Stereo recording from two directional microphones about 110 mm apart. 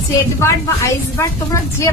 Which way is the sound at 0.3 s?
25° left (ahead or behind).